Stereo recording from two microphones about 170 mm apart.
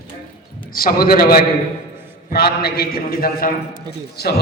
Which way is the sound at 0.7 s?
60° left (ahead or behind).